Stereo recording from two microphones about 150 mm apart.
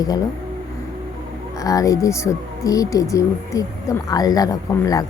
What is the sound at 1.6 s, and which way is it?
Speech, 25° left (ahead or behind).